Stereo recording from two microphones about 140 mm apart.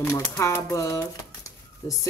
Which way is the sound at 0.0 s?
20° left (ahead or behind).